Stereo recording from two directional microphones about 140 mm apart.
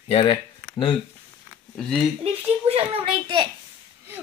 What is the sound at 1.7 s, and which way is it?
Speech, 5° left (ahead or behind).